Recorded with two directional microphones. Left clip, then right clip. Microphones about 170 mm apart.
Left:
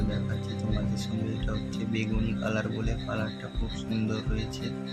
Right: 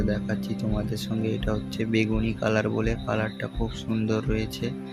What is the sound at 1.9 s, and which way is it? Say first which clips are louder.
Speech: right 7 dB; 35° right (ahead or behind).